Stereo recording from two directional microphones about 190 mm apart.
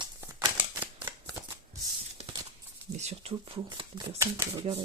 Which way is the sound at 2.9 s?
35° right (ahead or behind).